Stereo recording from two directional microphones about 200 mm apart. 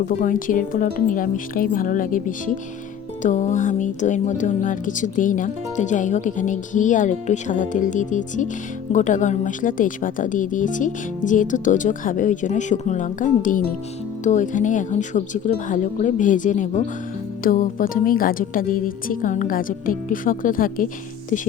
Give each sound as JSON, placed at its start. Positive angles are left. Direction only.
{"t": 0.1, "sound": "a woman's voice", "side_deg": 40}